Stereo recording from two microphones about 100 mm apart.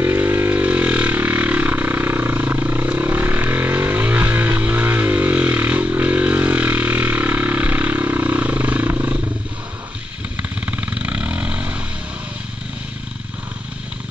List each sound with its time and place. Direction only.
0.0 s vehicle: 20° right (ahead or behind)
10.3 s vehicle: 20° right (ahead or behind)